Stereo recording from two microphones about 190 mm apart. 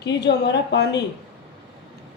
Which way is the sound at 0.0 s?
65° left (ahead or behind).